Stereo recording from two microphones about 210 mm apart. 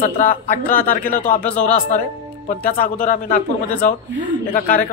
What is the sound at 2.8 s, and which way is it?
Speech, 40° left (ahead or behind).